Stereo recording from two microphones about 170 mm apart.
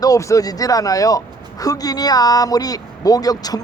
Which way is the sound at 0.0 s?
20° left (ahead or behind).